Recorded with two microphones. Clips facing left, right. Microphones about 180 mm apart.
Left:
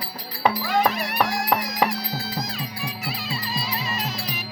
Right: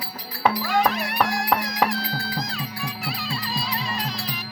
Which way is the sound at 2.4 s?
Centre (ahead or behind).